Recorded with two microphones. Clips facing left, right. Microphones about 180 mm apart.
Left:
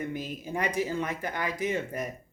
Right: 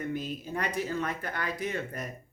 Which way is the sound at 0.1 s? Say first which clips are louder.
Even; 15° left (ahead or behind).